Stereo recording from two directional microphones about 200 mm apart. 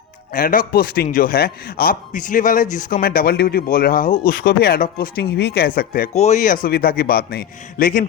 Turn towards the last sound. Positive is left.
turn(degrees=40)  # may be behind; listen again after turning